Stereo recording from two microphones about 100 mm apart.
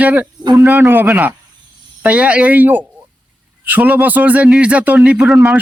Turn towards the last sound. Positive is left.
turn(degrees=-10)  # may be behind; listen again after turning